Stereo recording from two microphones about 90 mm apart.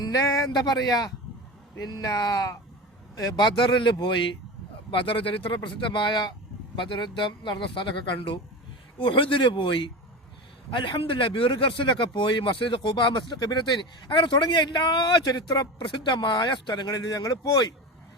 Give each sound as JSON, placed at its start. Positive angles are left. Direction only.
{"t": 0.0, "sound": "speech", "side_deg": 40}
{"t": 0.5, "sound": "speech", "side_deg": 50}
{"t": 4.9, "sound": "speech", "side_deg": 75}
{"t": 5.6, "sound": "speech", "side_deg": 60}